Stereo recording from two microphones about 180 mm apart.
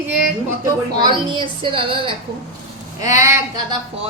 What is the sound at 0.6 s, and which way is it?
A woman's voice, 25° right (ahead or behind).